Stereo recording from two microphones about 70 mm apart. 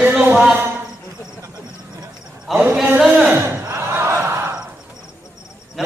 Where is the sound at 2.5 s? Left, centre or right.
Centre.